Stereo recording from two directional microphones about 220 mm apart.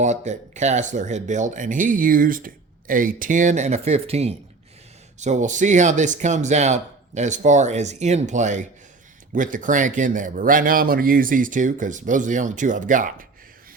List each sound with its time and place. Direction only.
0.0 s speech: 30° right (ahead or behind)